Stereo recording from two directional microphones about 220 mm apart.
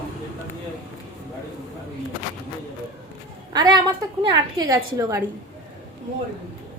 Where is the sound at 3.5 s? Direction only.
20° right (ahead or behind).